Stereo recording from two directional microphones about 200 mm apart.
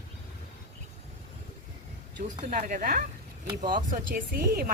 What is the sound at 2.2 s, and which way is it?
Speech, 40° right (ahead or behind).